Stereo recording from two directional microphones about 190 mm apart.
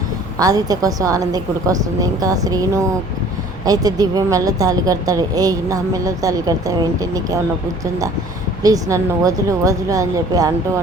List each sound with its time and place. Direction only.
0.3 s speech: 20° right (ahead or behind)
8.6 s a woman's voice: 20° right (ahead or behind)